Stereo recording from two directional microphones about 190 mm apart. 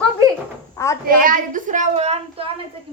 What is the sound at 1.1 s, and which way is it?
A child's voice, 45° right (ahead or behind).